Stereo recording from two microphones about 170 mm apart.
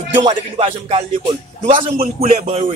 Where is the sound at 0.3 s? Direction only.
35° right (ahead or behind).